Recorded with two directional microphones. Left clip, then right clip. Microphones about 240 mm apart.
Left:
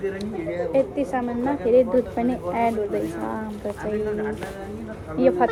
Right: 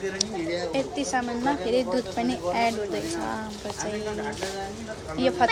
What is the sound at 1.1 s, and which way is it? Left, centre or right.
A woman's voice, centre.